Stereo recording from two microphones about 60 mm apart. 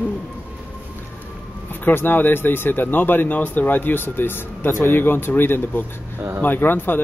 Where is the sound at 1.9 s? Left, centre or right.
Left.